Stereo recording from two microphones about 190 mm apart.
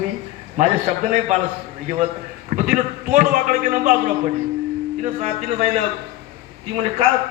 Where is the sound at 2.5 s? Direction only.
40° right (ahead or behind).